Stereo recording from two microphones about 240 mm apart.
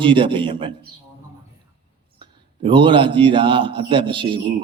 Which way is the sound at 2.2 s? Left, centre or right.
Right.